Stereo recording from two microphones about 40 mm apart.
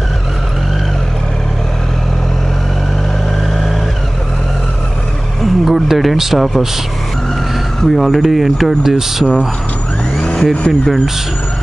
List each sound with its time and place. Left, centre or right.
5.4 s a sound: centre
7.9 s speech: centre
10.2 s vehicle: left